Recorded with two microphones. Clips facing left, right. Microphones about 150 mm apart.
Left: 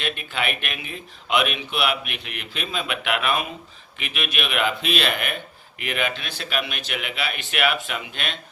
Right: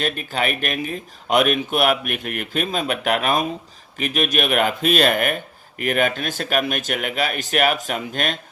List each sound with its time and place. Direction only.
0.0 s speech: 40° right (ahead or behind)